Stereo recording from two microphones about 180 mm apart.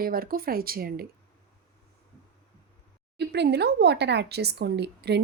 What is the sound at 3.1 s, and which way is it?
Speech, 70° right (ahead or behind).